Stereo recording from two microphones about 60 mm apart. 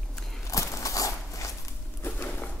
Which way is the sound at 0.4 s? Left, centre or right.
Left.